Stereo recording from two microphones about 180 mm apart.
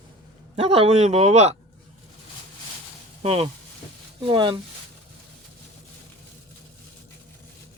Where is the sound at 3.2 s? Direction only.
30° right (ahead or behind).